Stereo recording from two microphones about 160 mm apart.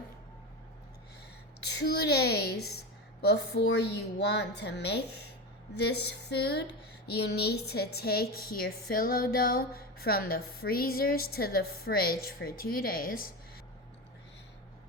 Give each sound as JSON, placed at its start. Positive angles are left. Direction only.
{"t": 1.6, "sound": "a woman's voice", "side_deg": 90}
{"t": 6.3, "sound": "a woman's voice", "side_deg": 90}